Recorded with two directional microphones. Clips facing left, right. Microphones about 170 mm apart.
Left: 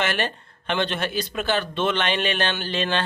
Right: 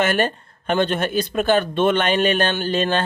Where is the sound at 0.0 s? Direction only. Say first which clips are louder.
Right 6 dB; 45° right (ahead or behind).